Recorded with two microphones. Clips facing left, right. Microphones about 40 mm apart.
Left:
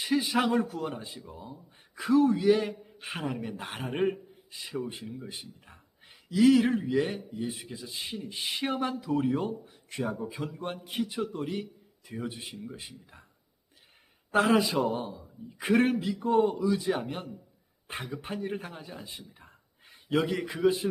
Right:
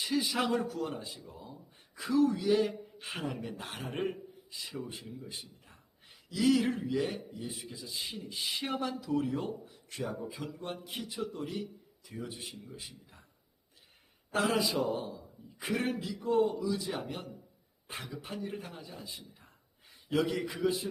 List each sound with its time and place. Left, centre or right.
0.0 s a man's voice: left
2.0 s a man's voice: left
2.3 s a man's voice: left
2.6 s a man's voice: centre; by 8.0 s left
8.0 s speech: centre
8.3 s a man's voice: left
14.3 s a man's voice: left
19.0 s a man's voice: left
19.9 s a sound: left
20.2 s speech: centre
20.7 s a man's voice: left